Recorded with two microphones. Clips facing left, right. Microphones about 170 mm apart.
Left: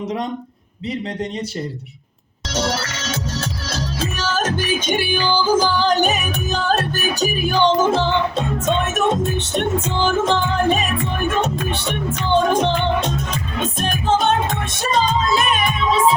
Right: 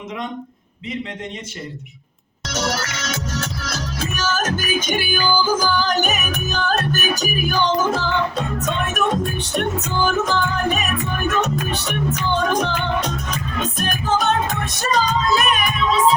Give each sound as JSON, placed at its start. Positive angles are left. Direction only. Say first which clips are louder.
{"t": 2.5, "sound": "music", "louder": "left 2 dB", "side_deg": 30}